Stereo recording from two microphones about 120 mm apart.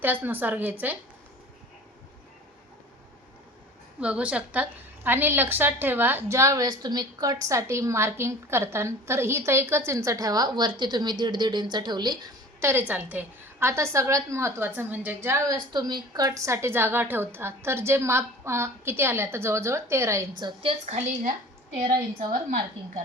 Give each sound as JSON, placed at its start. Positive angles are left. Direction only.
{"t": 0.0, "sound": "a woman's voice", "side_deg": -15}
{"t": 4.0, "sound": "a woman's voice", "side_deg": -10}
{"t": 12.5, "sound": "a woman's voice", "side_deg": -20}
{"t": 15.7, "sound": "a woman's voice", "side_deg": -35}
{"t": 20.4, "sound": "a woman's voice", "side_deg": -50}